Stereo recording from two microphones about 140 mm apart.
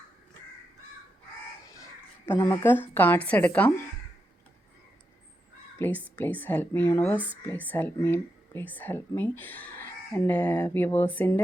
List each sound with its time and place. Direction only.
1.7 s a sound: 20° left (ahead or behind)
2.6 s speech: 15° left (ahead or behind)
5.8 s speech: 10° left (ahead or behind)